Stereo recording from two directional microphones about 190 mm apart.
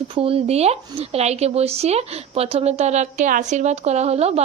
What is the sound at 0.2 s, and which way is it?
Speech, 30° right (ahead or behind).